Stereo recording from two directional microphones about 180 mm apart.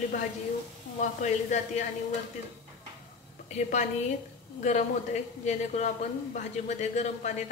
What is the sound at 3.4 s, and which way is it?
A woman's voice, 40° left (ahead or behind).